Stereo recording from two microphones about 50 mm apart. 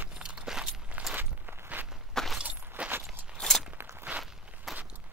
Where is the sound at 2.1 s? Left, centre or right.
Centre.